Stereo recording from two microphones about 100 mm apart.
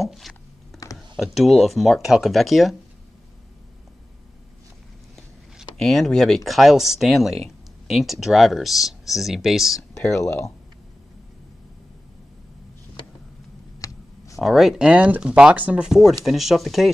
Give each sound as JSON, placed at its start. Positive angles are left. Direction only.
{"t": 0.0, "sound": "computer keyboard", "side_deg": 0}
{"t": 0.9, "sound": "speech", "side_deg": 0}
{"t": 5.6, "sound": "speech", "side_deg": 5}
{"t": 10.2, "sound": "speech", "side_deg": 30}
{"t": 13.7, "sound": "a sound", "side_deg": 35}
{"t": 14.4, "sound": "speech", "side_deg": -5}